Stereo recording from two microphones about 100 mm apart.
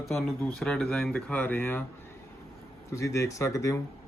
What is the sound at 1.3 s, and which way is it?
Speech, 15° left (ahead or behind).